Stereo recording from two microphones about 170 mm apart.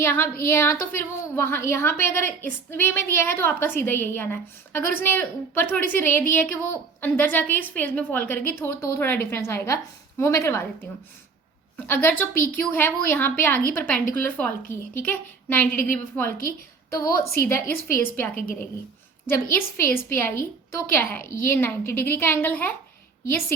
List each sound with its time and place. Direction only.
0.0 s a woman's voice: 15° left (ahead or behind)
11.9 s a woman's voice: 10° left (ahead or behind)
19.7 s a woman's voice: 15° left (ahead or behind)